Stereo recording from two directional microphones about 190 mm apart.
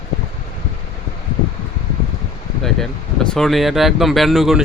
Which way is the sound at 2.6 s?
Centre (ahead or behind).